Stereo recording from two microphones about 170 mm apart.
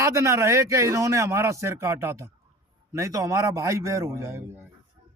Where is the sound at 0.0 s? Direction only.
15° right (ahead or behind).